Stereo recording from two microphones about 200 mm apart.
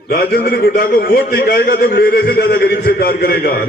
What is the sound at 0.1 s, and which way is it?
A man's voice, 50° left (ahead or behind).